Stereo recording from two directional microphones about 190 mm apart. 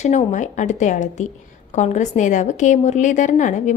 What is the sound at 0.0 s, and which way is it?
A woman's voice, 40° left (ahead or behind).